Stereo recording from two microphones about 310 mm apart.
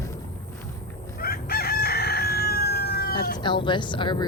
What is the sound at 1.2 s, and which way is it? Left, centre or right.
Crowing, left.